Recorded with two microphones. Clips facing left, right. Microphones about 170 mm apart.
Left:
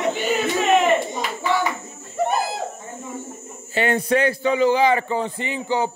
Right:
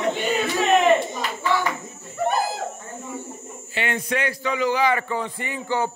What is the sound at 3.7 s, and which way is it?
A man's voice, 35° left (ahead or behind).